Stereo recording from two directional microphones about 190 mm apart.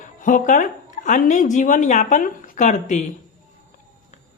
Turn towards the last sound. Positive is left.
turn(degrees=40)  # may be behind; listen again after turning